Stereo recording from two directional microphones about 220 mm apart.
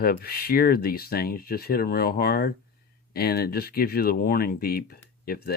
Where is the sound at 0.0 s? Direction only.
40° left (ahead or behind).